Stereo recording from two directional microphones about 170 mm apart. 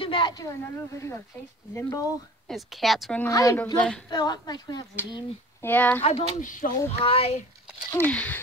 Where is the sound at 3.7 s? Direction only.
5° left (ahead or behind).